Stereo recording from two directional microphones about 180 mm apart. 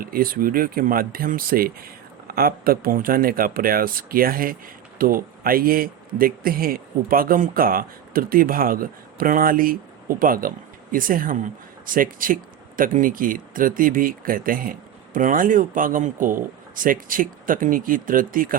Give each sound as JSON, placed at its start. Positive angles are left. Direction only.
{"t": 0.0, "sound": "speech", "side_deg": -55}